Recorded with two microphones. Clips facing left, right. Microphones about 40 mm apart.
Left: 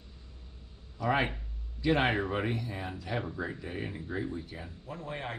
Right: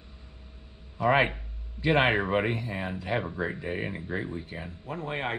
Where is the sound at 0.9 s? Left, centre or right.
Right.